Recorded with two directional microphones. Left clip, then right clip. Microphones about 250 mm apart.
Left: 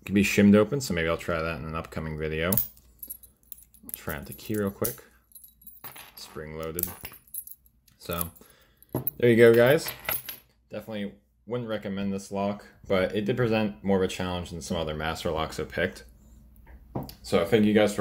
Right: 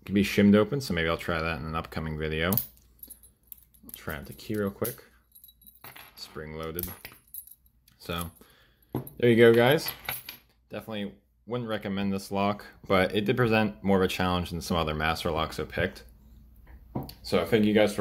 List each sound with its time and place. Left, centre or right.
0.0 s speech: centre
3.9 s speech: centre
5.8 s coin: centre
8.0 s a sound: centre
9.1 s speech: centre